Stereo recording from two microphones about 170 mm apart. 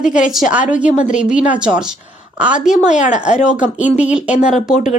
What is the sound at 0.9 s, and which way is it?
Speech, 45° left (ahead or behind).